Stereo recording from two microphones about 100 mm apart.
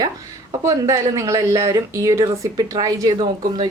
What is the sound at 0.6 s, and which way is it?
A woman's voice, 30° right (ahead or behind).